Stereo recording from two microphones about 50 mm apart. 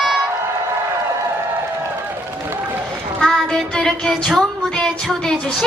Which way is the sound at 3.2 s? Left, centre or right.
Centre.